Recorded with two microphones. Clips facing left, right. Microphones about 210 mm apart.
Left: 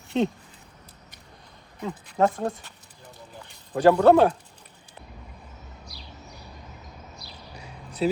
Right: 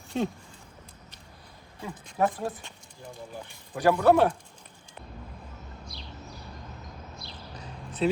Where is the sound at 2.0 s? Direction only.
60° left (ahead or behind).